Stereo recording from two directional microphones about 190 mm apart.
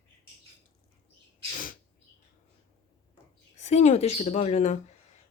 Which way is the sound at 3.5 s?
35° left (ahead or behind).